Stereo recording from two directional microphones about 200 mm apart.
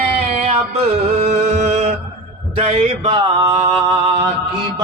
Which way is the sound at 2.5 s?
30° right (ahead or behind).